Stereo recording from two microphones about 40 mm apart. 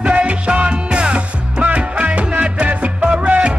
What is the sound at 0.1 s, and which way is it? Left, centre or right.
Music, right.